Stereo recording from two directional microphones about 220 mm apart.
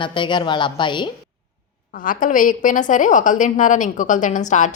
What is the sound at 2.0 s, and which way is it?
A woman's voice, 40° left (ahead or behind).